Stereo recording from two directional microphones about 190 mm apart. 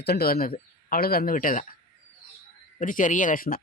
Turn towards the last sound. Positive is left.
turn(degrees=50)  # may be behind; listen again after turning